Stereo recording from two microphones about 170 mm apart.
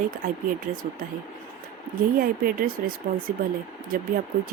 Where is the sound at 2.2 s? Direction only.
60° right (ahead or behind).